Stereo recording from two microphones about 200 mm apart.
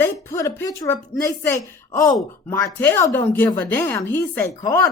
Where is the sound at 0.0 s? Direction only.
15° left (ahead or behind).